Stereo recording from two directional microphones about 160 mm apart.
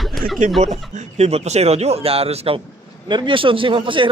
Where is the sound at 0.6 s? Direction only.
45° right (ahead or behind).